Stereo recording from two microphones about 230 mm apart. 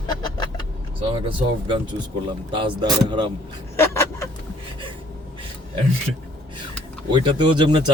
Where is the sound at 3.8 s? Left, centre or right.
Centre.